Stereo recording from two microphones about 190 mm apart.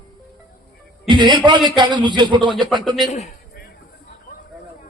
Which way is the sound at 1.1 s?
25° right (ahead or behind).